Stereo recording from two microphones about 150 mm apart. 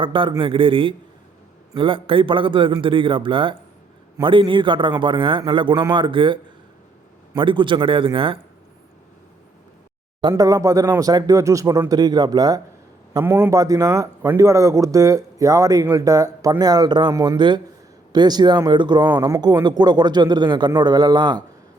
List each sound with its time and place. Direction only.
0.0 s a man's voice: 35° right (ahead or behind)
10.2 s speech: 25° right (ahead or behind)
13.1 s speech: 15° right (ahead or behind)